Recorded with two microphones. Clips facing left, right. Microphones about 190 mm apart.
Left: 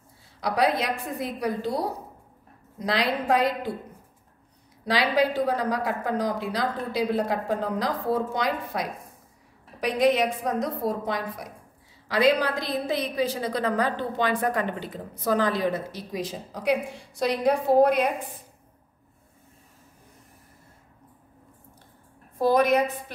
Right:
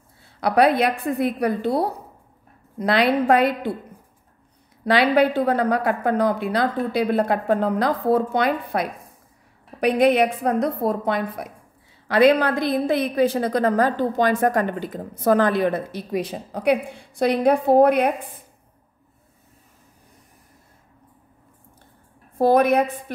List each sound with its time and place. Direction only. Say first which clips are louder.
0.4 s a woman's voice: right 7 dB; 60° right (ahead or behind)
4.8 s a woman's voice: right 6 dB; 60° right (ahead or behind)
22.4 s a woman's voice: right 4 dB; 55° right (ahead or behind)